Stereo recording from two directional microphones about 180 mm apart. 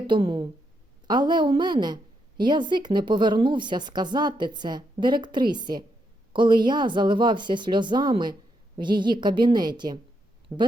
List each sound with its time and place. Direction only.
0.1 s speech: 25° right (ahead or behind)
10.5 s speech: 10° right (ahead or behind)